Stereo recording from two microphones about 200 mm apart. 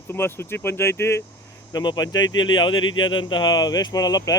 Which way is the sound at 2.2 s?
75° left (ahead or behind).